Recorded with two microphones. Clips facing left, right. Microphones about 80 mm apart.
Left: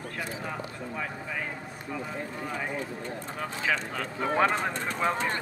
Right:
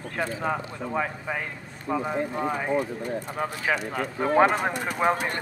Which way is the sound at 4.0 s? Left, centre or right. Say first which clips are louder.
Right 7 dB; right.